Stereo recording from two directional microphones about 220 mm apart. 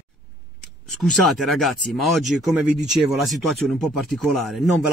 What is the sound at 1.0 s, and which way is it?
Speech, centre (ahead or behind).